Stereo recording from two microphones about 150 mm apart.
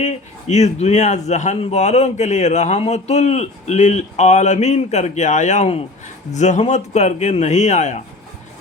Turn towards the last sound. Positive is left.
turn(degrees=50)  # may be behind; listen again after turning